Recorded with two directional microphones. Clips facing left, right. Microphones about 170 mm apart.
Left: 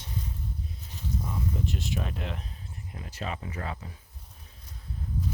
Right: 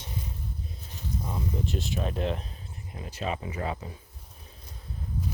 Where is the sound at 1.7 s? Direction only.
30° right (ahead or behind).